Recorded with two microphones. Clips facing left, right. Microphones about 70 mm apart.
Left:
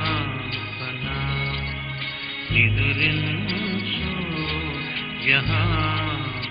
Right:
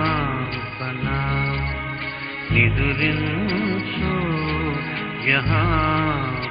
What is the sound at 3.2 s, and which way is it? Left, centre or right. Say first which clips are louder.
Music: right 4 dB; right.